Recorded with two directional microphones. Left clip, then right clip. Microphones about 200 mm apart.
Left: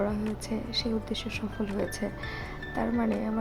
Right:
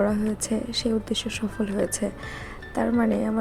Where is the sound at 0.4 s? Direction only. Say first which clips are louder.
Right 3 dB; 20° right (ahead or behind).